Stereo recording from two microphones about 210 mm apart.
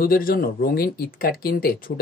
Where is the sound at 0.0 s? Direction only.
45° left (ahead or behind).